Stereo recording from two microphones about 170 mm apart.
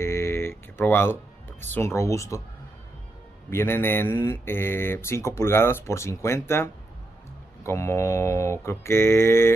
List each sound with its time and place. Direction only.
0.0 s a sound: 15° left (ahead or behind)
1.6 s speech: 15° left (ahead or behind)
3.4 s speech: 15° left (ahead or behind)